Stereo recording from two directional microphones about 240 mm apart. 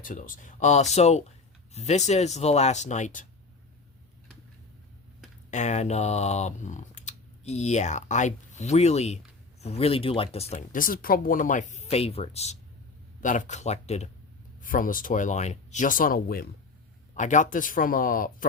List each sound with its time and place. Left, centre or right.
0.0 s speech: left
5.5 s speech: left